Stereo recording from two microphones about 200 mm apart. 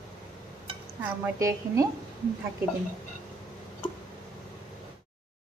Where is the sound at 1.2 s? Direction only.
15° right (ahead or behind).